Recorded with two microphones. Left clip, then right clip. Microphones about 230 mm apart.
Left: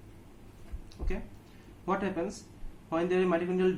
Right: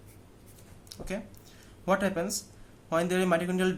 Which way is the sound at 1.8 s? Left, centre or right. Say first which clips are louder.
Right 4 dB; right.